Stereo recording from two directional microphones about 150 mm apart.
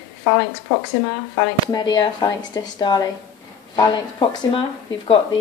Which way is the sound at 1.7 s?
30° left (ahead or behind).